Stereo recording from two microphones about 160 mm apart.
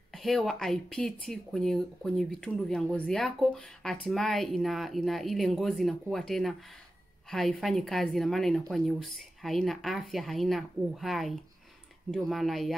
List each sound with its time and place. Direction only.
0.1 s speech: centre (ahead or behind)